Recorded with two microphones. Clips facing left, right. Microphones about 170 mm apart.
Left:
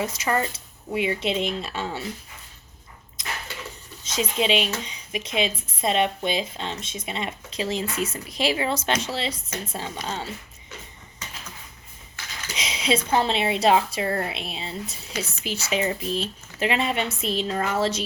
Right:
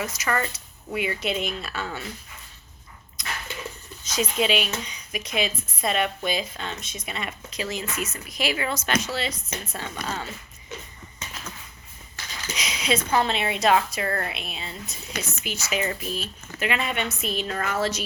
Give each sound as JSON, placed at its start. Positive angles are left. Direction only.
{"t": 0.0, "sound": "a woman's voice", "side_deg": 30}
{"t": 3.2, "sound": "a sound", "side_deg": 25}
{"t": 4.0, "sound": "a woman's voice", "side_deg": 25}
{"t": 12.5, "sound": "a woman's voice", "side_deg": 30}